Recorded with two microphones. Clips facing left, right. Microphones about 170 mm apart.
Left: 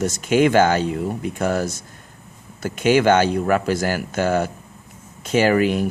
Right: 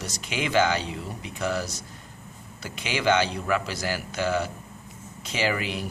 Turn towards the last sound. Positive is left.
turn(degrees=50)  # may be behind; listen again after turning